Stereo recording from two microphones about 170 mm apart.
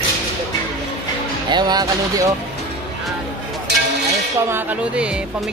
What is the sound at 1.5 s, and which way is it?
Speech, 25° right (ahead or behind).